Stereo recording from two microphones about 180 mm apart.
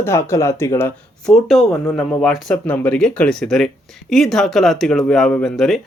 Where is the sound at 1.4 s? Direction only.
Centre (ahead or behind).